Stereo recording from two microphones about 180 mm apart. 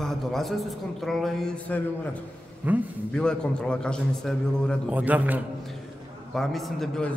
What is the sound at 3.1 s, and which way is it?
A man's voice, 5° left (ahead or behind).